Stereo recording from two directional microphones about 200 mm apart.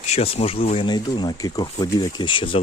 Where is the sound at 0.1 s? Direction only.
30° left (ahead or behind).